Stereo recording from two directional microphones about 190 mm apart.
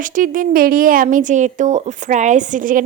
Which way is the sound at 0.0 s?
45° right (ahead or behind).